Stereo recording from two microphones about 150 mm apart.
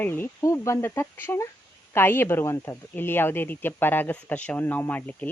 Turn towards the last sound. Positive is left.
turn(degrees=10)  # may be behind; listen again after turning